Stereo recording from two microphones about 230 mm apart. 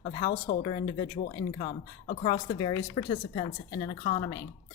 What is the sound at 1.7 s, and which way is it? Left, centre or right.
Speech, left.